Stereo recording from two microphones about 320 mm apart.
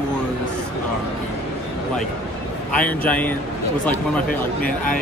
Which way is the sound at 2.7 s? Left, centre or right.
Centre.